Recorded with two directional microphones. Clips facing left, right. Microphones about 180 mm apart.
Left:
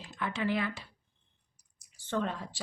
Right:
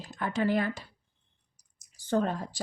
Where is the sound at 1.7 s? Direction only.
40° right (ahead or behind).